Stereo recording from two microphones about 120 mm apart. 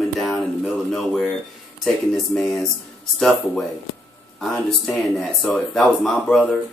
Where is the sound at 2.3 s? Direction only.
Centre (ahead or behind).